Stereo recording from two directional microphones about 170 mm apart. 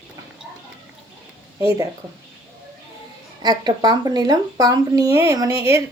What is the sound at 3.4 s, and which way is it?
Speech, 25° right (ahead or behind).